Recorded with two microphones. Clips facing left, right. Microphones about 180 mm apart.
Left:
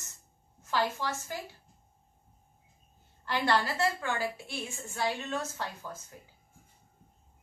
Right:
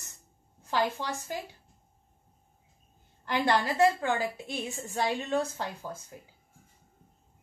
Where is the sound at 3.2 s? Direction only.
15° right (ahead or behind).